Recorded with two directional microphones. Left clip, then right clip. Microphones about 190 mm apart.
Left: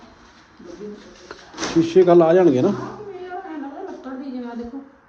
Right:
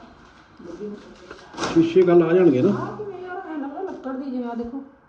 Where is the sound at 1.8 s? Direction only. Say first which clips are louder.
Left 3 dB; 20° left (ahead or behind).